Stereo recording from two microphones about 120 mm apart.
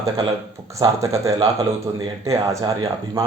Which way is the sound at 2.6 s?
50° right (ahead or behind).